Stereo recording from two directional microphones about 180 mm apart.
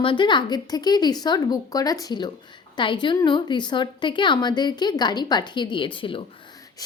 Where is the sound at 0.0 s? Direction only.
25° left (ahead or behind).